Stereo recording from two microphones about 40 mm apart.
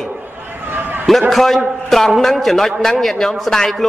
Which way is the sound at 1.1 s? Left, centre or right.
Centre.